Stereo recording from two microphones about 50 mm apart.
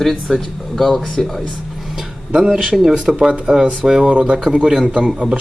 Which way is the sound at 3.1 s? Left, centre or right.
Right.